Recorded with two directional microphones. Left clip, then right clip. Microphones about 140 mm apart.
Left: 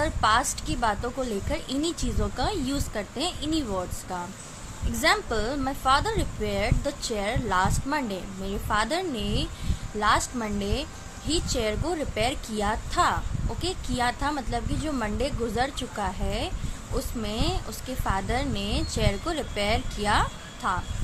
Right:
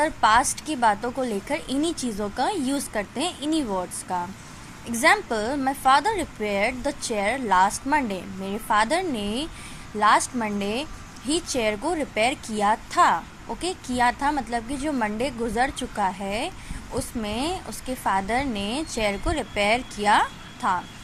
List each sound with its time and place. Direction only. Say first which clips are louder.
0.0 s speech: right 4 dB; 15° right (ahead or behind)